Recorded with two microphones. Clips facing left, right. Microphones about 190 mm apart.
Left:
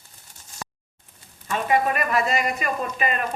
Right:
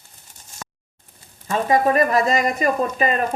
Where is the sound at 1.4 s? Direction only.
35° right (ahead or behind).